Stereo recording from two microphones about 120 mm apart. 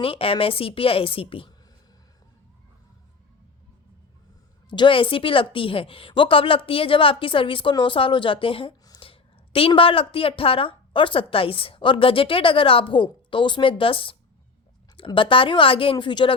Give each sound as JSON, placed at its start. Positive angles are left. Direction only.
{"t": 0.0, "sound": "a woman's voice", "side_deg": 50}
{"t": 4.7, "sound": "a woman's voice", "side_deg": 45}